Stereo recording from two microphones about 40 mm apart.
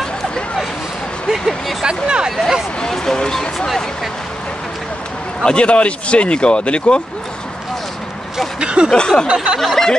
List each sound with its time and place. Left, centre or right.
1.3 s speech: centre
1.9 s speech: right
2.9 s speech: centre
5.4 s speech: left
8.5 s a sound: right
8.9 s speech: left
9.3 s speech: right
9.6 s speech: centre